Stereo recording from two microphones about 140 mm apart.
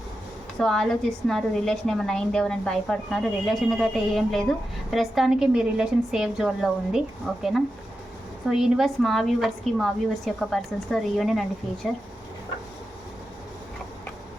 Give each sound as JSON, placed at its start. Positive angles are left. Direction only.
{"t": 0.6, "sound": "a woman's voice", "side_deg": 5}
{"t": 8.4, "sound": "a woman's voice", "side_deg": -5}